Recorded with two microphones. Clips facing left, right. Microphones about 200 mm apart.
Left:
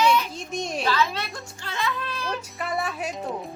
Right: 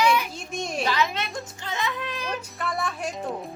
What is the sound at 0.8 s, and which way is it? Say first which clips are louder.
A child's voice: left 2 dB; 20° right (ahead or behind).